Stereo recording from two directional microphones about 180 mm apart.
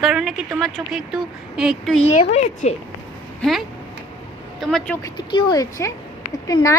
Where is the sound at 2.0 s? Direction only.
40° left (ahead or behind).